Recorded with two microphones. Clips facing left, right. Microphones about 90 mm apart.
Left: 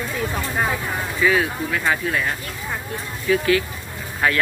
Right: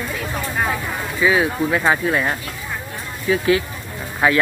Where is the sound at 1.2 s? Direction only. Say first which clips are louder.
Right 3 dB; 25° right (ahead or behind).